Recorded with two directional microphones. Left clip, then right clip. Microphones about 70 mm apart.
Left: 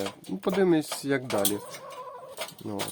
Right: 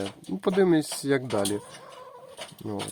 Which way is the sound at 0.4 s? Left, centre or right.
Right.